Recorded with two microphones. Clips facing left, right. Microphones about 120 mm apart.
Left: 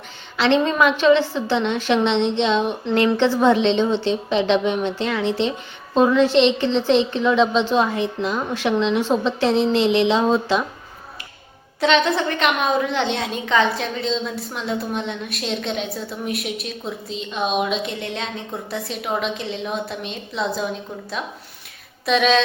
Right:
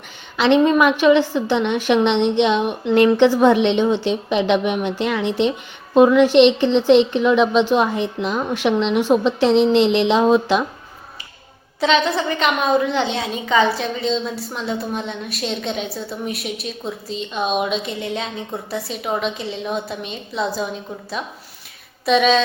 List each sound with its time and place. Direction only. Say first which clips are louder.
0.3 s a woman's voice: right 3 dB; 15° right (ahead or behind)
11.8 s a woman's voice: even; centre (ahead or behind)
22.0 s a woman's voice: right 2 dB; centre (ahead or behind)